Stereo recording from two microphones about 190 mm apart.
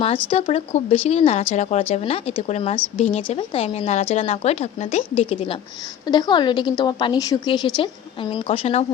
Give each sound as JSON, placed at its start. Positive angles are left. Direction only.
{"t": 0.3, "sound": "speech", "side_deg": 30}
{"t": 6.1, "sound": "a woman's voice", "side_deg": 25}